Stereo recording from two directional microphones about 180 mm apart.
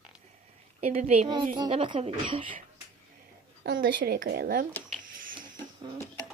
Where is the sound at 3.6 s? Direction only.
60° right (ahead or behind).